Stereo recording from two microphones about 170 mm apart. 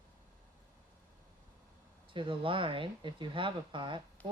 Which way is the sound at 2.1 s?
30° right (ahead or behind).